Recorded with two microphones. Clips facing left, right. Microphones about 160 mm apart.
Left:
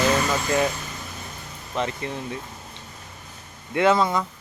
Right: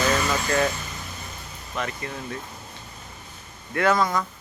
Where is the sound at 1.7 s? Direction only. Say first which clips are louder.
Left 4 dB; 25° left (ahead or behind).